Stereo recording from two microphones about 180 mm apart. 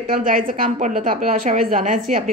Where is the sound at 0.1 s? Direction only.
50° right (ahead or behind).